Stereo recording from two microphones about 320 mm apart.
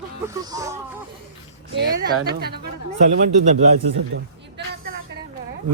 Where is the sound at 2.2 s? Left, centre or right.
Right.